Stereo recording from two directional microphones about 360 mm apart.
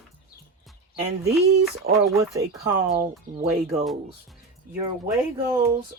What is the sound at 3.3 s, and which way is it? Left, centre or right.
Speech, centre.